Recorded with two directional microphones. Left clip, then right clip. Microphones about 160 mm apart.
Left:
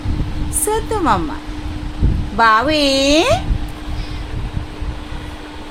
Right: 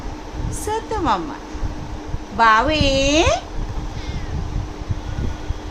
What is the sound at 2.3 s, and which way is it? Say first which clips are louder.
A woman's voice: left 2 dB; 55° left (ahead or behind).